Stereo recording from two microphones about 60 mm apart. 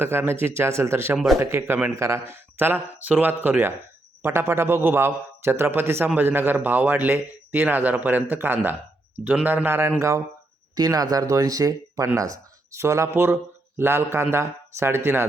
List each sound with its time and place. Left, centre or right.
0.0 s a man's voice: right
3.0 s a man's voice: right
10.8 s speech: right
13.7 s a man's voice: right